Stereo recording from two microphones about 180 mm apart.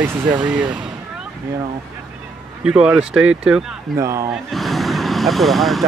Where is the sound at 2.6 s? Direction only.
5° right (ahead or behind).